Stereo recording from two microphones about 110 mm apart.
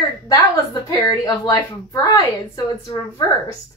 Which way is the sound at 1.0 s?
40° left (ahead or behind).